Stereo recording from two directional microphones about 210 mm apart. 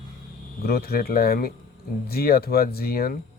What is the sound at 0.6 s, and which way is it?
Speech, 45° left (ahead or behind).